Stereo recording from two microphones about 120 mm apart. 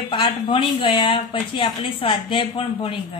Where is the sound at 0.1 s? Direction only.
45° left (ahead or behind).